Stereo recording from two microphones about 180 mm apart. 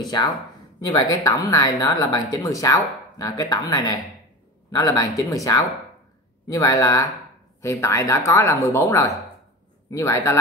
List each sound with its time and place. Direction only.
0.0 s speech: 25° left (ahead or behind)